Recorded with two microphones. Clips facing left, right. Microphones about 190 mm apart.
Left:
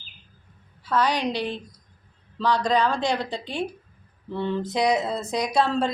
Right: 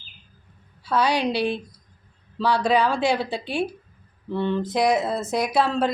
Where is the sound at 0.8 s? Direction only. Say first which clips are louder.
Right 2 dB; 10° right (ahead or behind).